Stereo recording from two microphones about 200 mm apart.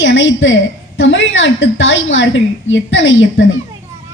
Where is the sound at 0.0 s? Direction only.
70° left (ahead or behind).